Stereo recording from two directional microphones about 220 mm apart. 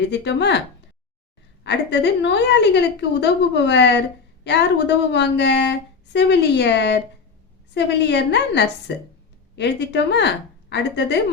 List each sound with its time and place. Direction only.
0.1 s a woman's voice: 50° left (ahead or behind)
1.6 s a woman's voice: 50° left (ahead or behind)